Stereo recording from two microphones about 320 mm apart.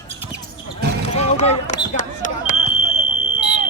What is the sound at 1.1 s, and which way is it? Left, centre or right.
Basketball bounce, centre.